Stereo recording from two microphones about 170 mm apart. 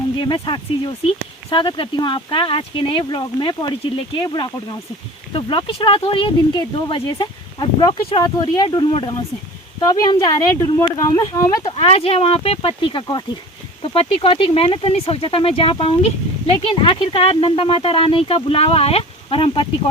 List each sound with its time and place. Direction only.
0.2 s speech: 30° left (ahead or behind)
11.6 s speech: 35° left (ahead or behind)